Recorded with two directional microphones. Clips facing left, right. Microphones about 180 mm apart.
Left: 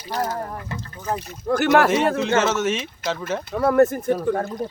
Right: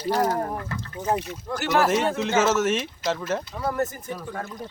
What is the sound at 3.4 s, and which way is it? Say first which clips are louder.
Speech: left 10 dB; 60° left (ahead or behind).